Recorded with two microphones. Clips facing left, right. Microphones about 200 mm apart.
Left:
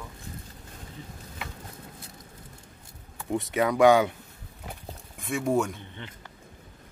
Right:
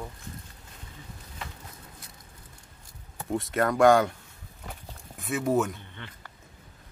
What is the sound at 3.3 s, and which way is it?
Speech, centre (ahead or behind).